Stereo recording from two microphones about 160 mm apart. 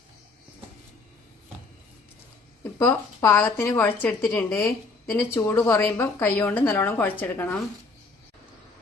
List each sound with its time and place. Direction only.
2.7 s a woman's voice: 20° left (ahead or behind)